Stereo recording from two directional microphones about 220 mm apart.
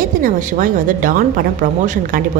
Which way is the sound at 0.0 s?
35° right (ahead or behind).